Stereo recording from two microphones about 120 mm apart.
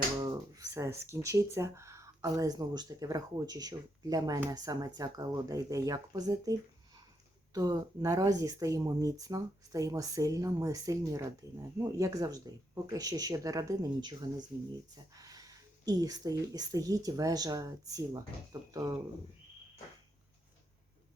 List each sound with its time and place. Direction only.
0.2 s speech: 30° right (ahead or behind)